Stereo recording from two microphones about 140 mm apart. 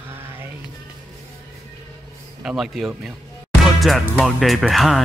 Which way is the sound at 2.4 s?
Centre (ahead or behind).